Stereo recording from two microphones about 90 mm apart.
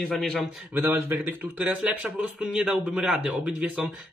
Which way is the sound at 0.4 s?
25° right (ahead or behind).